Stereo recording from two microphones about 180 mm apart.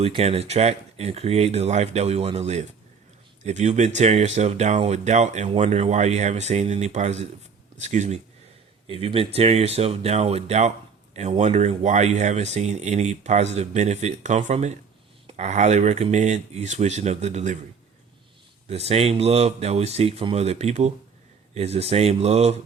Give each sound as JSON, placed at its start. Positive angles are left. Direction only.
{"t": 0.0, "sound": "speech", "side_deg": -35}
{"t": 18.7, "sound": "speech", "side_deg": -35}